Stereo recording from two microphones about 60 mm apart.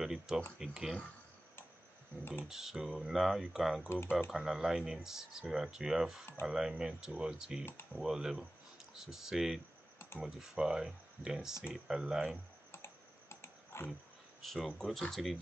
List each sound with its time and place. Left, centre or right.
0.0 s speech: centre
2.4 s speech: centre
12.7 s typing: left
14.4 s speech: centre